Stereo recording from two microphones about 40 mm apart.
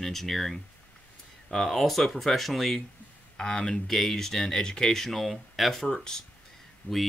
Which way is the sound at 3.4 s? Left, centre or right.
Centre.